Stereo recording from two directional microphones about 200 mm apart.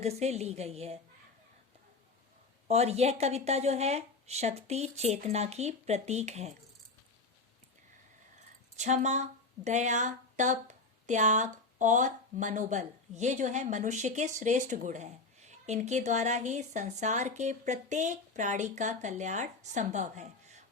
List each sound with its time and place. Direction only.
0.0 s speech: 35° right (ahead or behind)
2.6 s speech: 30° right (ahead or behind)
8.8 s speech: 35° right (ahead or behind)